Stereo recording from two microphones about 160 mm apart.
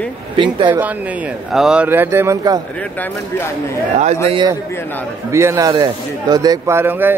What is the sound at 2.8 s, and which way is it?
Speech, 15° left (ahead or behind).